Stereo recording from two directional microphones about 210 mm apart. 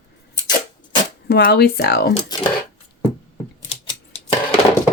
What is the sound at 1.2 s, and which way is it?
Speech, 50° left (ahead or behind).